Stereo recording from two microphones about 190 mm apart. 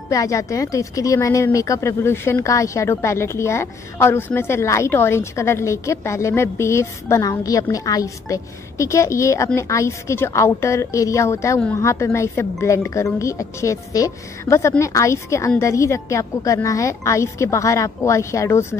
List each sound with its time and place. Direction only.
0.1 s speech: 15° left (ahead or behind)